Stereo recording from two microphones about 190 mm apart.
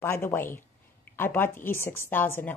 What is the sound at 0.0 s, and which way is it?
A woman's voice, 10° left (ahead or behind).